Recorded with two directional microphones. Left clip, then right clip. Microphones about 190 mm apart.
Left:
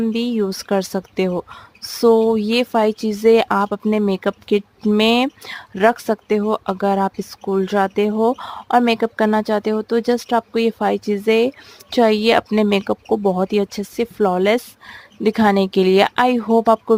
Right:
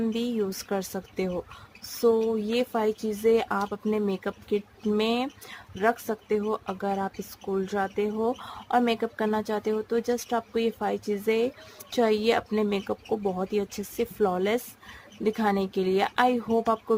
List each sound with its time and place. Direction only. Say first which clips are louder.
0.0 s speech: left 8 dB; 30° left (ahead or behind)